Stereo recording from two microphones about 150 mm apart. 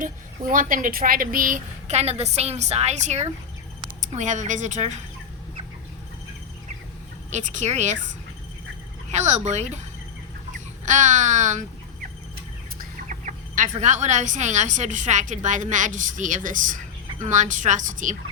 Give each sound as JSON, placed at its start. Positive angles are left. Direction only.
{"t": 0.0, "sound": "speech", "side_deg": -65}
{"t": 7.3, "sound": "speech", "side_deg": -55}
{"t": 9.1, "sound": "speech", "side_deg": -50}
{"t": 10.8, "sound": "speech", "side_deg": -55}
{"t": 13.1, "sound": "speech", "side_deg": -55}